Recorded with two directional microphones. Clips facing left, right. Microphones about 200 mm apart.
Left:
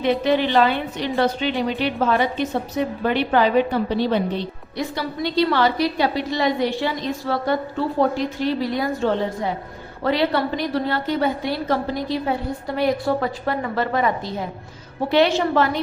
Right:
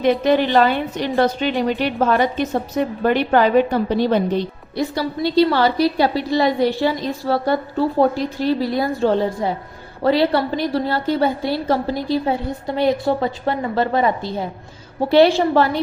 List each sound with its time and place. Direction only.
0.0 s a woman's voice: 45° right (ahead or behind)
4.9 s a woman's voice: 35° right (ahead or behind)